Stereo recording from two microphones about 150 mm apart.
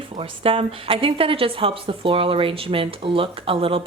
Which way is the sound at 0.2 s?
40° right (ahead or behind).